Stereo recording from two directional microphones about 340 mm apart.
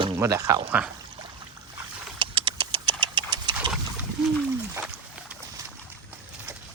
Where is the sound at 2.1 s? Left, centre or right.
Centre.